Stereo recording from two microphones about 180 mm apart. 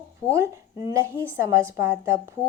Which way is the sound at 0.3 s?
15° right (ahead or behind).